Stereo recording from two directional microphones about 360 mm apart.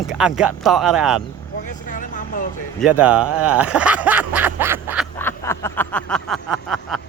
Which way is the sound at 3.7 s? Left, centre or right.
Centre.